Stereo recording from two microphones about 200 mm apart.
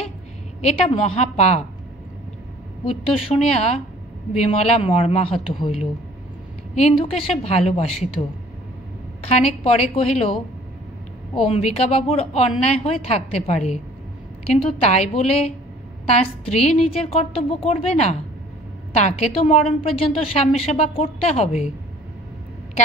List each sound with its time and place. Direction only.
0.6 s a woman's voice: 30° left (ahead or behind)
2.8 s a woman's voice: 30° left (ahead or behind)
9.3 s a woman's voice: 30° left (ahead or behind)
11.4 s a woman's voice: 35° left (ahead or behind)